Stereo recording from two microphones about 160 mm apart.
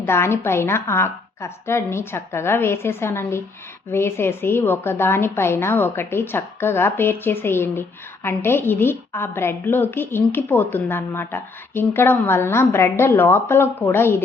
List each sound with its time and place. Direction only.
0.0 s a woman's voice: 15° left (ahead or behind)